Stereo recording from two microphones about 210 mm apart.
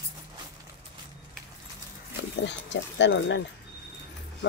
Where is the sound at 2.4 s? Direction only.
60° left (ahead or behind).